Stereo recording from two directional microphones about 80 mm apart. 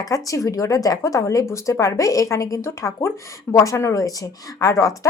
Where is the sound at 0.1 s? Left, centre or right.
Left.